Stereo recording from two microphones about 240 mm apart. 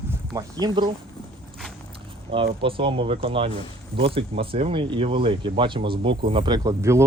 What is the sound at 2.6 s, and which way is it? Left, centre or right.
Speech, right.